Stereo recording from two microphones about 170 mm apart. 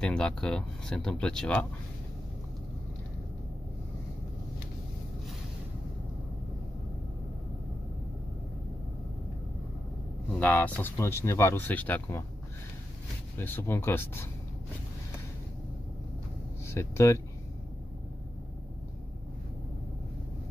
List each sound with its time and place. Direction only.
0.0 s speech: 5° left (ahead or behind)
10.3 s speech: 10° left (ahead or behind)
13.4 s speech: 15° left (ahead or behind)
16.6 s speech: 15° left (ahead or behind)